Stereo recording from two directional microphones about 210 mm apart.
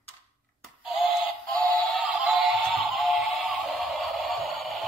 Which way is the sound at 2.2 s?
Centre (ahead or behind).